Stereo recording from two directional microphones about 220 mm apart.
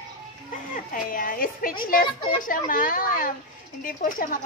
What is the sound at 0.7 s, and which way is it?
A woman's voice, 40° left (ahead or behind).